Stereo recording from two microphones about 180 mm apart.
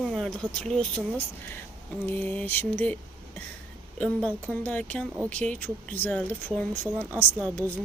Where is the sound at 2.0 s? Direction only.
10° left (ahead or behind).